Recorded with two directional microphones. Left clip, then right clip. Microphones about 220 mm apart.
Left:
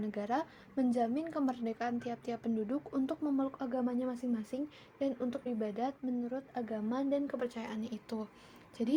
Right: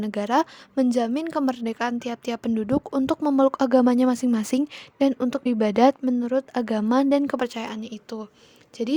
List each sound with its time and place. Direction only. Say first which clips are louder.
0.0 s a woman's voice: right 13 dB; 40° right (ahead or behind)